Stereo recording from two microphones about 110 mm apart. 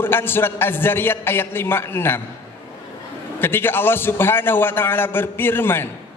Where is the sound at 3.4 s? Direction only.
20° left (ahead or behind).